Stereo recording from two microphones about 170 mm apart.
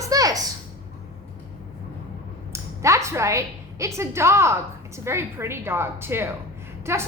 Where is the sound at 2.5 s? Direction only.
15° right (ahead or behind).